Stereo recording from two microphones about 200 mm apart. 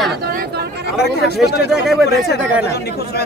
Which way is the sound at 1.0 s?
55° left (ahead or behind).